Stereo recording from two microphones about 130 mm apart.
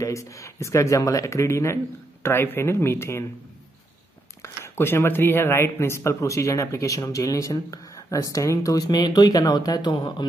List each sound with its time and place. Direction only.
0.0 s speech: 25° left (ahead or behind)
4.4 s speech: 20° left (ahead or behind); by 10.2 s 35° left (ahead or behind)